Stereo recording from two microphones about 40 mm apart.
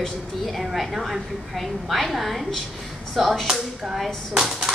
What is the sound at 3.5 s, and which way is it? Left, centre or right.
Speech, centre.